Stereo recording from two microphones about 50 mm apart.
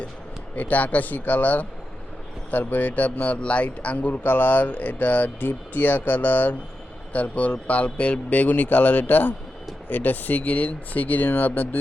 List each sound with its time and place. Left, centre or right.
0.5 s a man's voice: left